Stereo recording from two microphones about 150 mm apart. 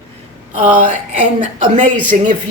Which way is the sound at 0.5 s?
55° right (ahead or behind).